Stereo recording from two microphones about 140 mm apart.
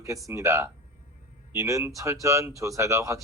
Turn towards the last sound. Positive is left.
turn(degrees=-20)  # may be behind; listen again after turning